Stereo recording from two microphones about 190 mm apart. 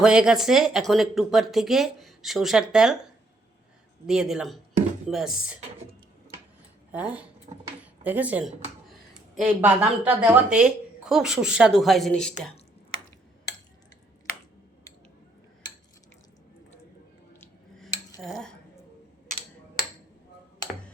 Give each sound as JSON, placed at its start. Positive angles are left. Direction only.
{"t": 0.0, "sound": "speech", "side_deg": -5}
{"t": 4.0, "sound": "speech", "side_deg": -5}
{"t": 6.9, "sound": "speech", "side_deg": -5}
{"t": 7.5, "sound": "speech", "side_deg": -30}
{"t": 8.0, "sound": "speech", "side_deg": -10}
{"t": 17.4, "sound": "a sound", "side_deg": 0}
{"t": 18.2, "sound": "cutlery", "side_deg": 0}